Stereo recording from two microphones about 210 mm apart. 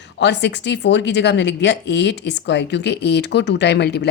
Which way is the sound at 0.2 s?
55° left (ahead or behind).